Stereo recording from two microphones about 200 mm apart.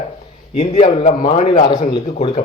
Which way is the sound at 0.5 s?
30° left (ahead or behind).